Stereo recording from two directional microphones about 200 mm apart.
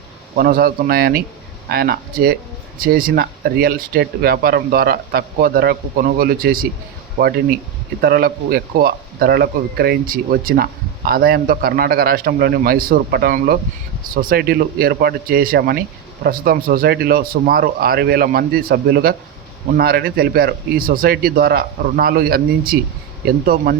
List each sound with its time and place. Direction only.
0.3 s speech: 45° right (ahead or behind)